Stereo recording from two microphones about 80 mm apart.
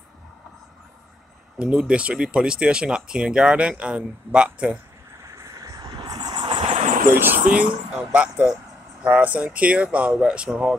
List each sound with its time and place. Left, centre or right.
1.6 s speech: centre
5.3 s vehicle: right
5.9 s a sound: right
7.2 s speech: right